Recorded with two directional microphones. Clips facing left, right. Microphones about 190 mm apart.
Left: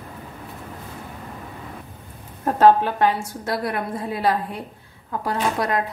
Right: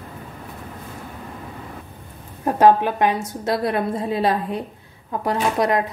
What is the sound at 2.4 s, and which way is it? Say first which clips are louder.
A woman's voice: even; 15° right (ahead or behind).